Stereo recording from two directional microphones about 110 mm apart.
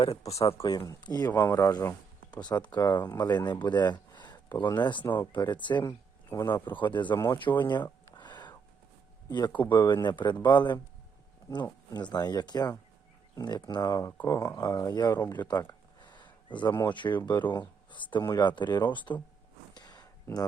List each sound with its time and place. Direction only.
0.0 s speech: 65° left (ahead or behind); by 0.8 s 50° left (ahead or behind)
1.0 s speech: 40° left (ahead or behind)
1.3 s speech: 20° left (ahead or behind)
2.3 s speech: 40° left (ahead or behind)
7.3 s a sound: 45° left (ahead or behind)
9.6 s speech: 40° left (ahead or behind)
16.0 s a sound: 45° left (ahead or behind)
16.9 s speech: 45° left (ahead or behind)
19.7 s a sound: 40° left (ahead or behind)